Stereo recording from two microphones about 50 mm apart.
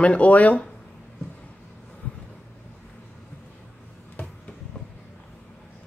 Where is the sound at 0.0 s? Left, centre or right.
Left.